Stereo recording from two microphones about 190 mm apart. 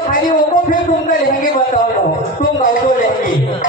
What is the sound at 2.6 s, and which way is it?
Music, 45° left (ahead or behind).